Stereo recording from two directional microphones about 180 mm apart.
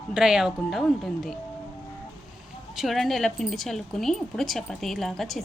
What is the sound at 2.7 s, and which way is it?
Speech, centre (ahead or behind).